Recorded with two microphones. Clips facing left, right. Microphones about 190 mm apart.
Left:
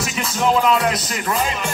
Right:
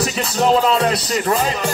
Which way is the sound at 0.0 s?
35° right (ahead or behind).